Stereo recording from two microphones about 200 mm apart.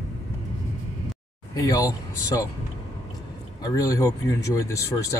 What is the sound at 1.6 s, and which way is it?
Speech, 15° left (ahead or behind).